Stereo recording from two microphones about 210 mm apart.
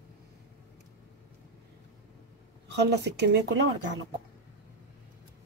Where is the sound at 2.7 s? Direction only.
55° right (ahead or behind).